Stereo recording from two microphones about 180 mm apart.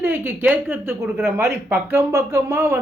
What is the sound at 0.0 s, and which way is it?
Speech, 10° right (ahead or behind).